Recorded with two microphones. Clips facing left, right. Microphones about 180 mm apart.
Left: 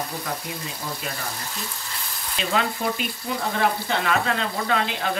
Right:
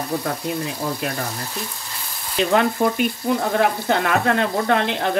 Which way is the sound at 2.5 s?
55° right (ahead or behind).